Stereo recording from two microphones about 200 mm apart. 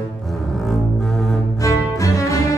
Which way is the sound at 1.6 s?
15° left (ahead or behind).